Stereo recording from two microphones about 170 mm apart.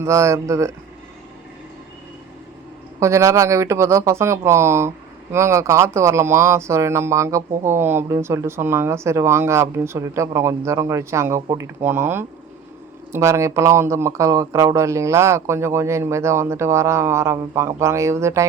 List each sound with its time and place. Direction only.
0.0 s speech: 15° right (ahead or behind)
3.0 s speech: 15° right (ahead or behind)